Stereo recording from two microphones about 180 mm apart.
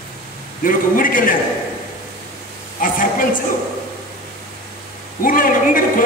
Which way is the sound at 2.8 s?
50° left (ahead or behind).